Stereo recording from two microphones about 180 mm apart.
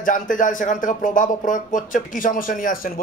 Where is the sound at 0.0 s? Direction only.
50° left (ahead or behind).